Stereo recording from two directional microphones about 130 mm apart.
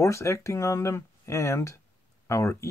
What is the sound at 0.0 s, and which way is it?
Speech, 25° left (ahead or behind).